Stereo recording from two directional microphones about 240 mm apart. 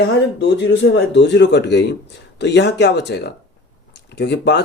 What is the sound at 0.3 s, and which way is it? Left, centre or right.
Speech, left.